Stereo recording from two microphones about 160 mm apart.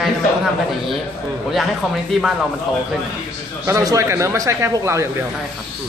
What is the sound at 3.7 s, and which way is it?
A man's voice, 20° right (ahead or behind).